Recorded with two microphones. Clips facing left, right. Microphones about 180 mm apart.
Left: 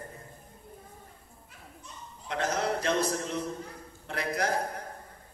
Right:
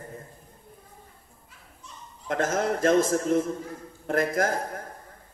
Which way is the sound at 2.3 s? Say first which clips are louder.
Right 4 dB; 45° right (ahead or behind).